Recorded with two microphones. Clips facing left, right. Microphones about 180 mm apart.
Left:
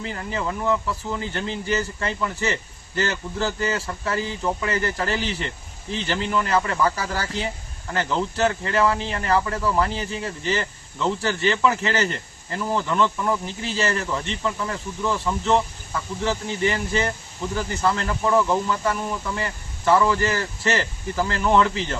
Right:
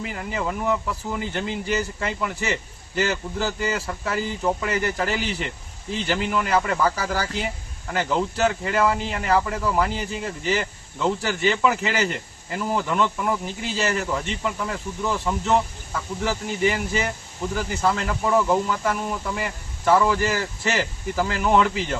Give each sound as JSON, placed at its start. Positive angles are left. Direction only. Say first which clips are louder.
{"t": 0.0, "sound": "speech", "louder": "even", "side_deg": -10}